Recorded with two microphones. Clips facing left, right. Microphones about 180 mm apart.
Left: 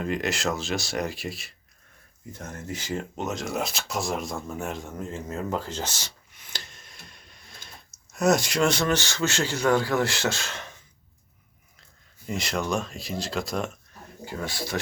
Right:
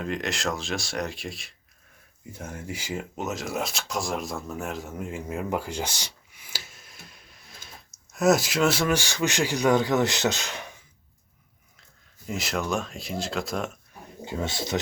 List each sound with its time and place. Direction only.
0.0 s speech: centre (ahead or behind)
2.3 s speech: 10° right (ahead or behind)
12.2 s speech: centre (ahead or behind)
14.3 s speech: 20° right (ahead or behind)